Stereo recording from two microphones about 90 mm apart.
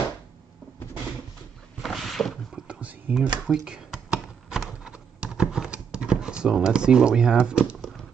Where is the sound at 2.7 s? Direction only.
15° right (ahead or behind).